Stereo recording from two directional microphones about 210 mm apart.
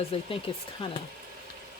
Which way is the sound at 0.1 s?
25° left (ahead or behind).